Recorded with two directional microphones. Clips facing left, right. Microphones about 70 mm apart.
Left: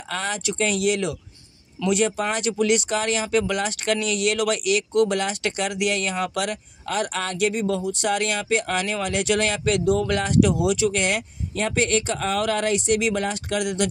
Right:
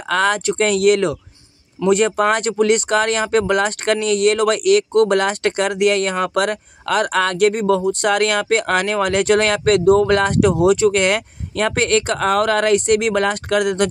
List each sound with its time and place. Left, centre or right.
0.1 s speech: right
0.4 s speech: right